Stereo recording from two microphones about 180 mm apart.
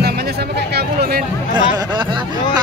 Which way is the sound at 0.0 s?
60° right (ahead or behind).